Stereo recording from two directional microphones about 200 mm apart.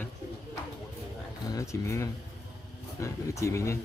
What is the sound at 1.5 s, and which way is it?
Speech, 15° left (ahead or behind).